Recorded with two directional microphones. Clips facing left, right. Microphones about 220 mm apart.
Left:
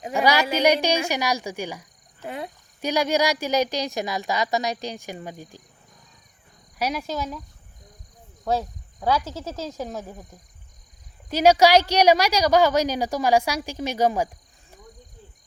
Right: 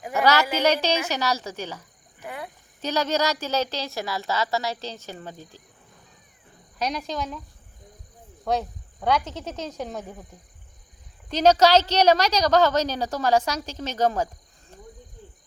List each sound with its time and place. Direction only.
0.1 s a woman's voice: 15° left (ahead or behind)
2.2 s speech: 25° left (ahead or behind)
2.8 s a woman's voice: 10° left (ahead or behind)
6.7 s a woman's voice: 5° left (ahead or behind)
8.4 s speech: 5° left (ahead or behind)
11.3 s a woman's voice: 10° left (ahead or behind)